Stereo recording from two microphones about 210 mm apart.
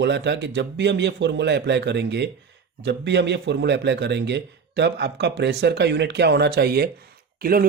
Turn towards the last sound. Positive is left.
turn(degrees=-45)  # may be behind; listen again after turning